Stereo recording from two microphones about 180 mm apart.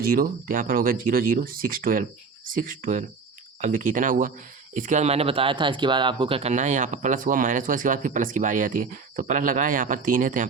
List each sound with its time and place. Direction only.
0.0 s speech: 55° right (ahead or behind)